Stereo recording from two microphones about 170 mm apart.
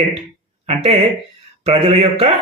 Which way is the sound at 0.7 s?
40° right (ahead or behind).